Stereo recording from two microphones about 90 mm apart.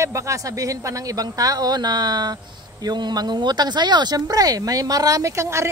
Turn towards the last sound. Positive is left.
turn(degrees=-30)  # may be behind; listen again after turning